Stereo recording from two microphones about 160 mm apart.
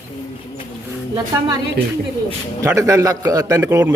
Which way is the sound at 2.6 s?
20° right (ahead or behind).